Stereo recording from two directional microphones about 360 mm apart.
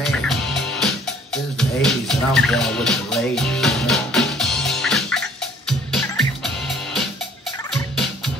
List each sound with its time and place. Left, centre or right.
0.0 s music: centre
7.7 s turkey: centre